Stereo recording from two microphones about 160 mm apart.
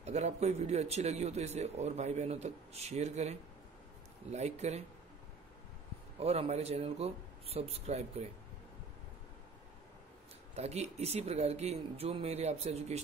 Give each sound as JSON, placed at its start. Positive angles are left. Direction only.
{"t": 0.0, "sound": "a man's voice", "side_deg": -45}
{"t": 6.1, "sound": "speech", "side_deg": -40}
{"t": 10.5, "sound": "speech", "side_deg": -40}